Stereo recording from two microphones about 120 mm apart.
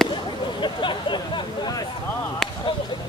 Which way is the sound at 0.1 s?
45° left (ahead or behind).